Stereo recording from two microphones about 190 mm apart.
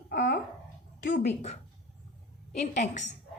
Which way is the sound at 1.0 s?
40° left (ahead or behind).